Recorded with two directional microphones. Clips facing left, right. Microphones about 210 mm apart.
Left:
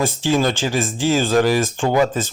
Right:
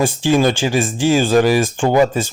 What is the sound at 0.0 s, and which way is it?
A man's voice, 15° right (ahead or behind).